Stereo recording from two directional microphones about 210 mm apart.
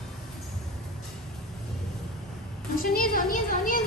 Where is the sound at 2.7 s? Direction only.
45° left (ahead or behind).